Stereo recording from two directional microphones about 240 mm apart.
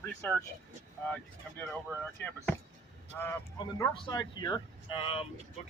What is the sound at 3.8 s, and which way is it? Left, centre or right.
Speech, centre.